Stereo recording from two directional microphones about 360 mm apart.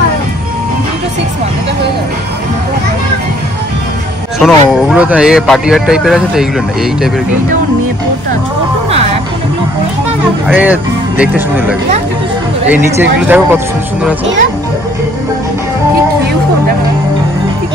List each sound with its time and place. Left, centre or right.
4.4 s speech: centre
10.4 s speech: centre